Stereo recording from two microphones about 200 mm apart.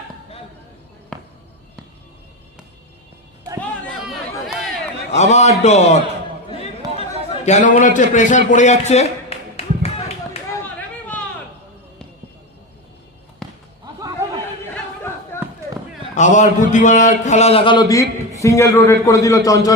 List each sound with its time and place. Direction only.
1.1 s basketball bounce: 5° left (ahead or behind)
4.1 s chatter: centre (ahead or behind)
5.1 s speech: 35° left (ahead or behind)
7.4 s a man's voice: 35° left (ahead or behind)
10.8 s chatter: 5° left (ahead or behind)
13.4 s basketball bounce: centre (ahead or behind)
15.3 s a sound: 10° left (ahead or behind)
16.1 s a man's voice: 35° left (ahead or behind); by 19.7 s 15° left (ahead or behind)